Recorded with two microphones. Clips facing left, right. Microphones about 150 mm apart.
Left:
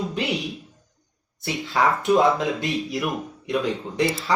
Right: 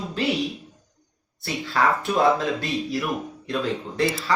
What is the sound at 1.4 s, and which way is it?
Speech, 20° left (ahead or behind).